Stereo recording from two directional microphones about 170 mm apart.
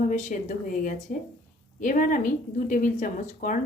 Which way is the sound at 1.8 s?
50° left (ahead or behind).